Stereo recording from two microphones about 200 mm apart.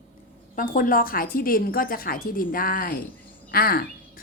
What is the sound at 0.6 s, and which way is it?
A woman's voice, 45° left (ahead or behind).